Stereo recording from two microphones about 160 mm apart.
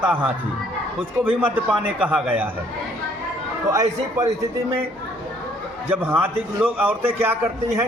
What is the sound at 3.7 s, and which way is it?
A man's voice, 20° right (ahead or behind).